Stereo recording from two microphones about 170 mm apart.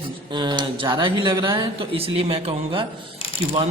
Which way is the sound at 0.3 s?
25° right (ahead or behind).